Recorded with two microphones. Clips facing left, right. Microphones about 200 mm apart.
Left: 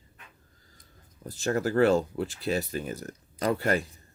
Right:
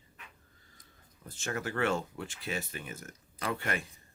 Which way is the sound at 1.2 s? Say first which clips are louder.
Left 9 dB; 35° left (ahead or behind).